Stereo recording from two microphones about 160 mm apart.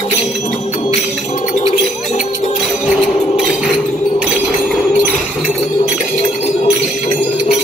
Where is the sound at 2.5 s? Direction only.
5° right (ahead or behind).